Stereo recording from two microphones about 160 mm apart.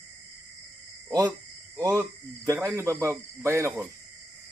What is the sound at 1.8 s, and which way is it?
Owl, 20° right (ahead or behind).